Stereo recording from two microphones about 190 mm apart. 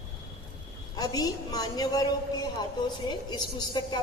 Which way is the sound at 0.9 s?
20° left (ahead or behind).